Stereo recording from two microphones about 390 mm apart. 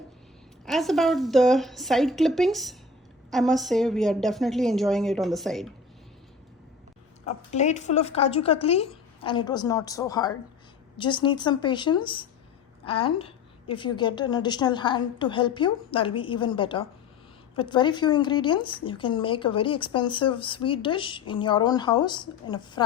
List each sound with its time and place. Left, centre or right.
0.6 s a woman's voice: centre
7.3 s speech: centre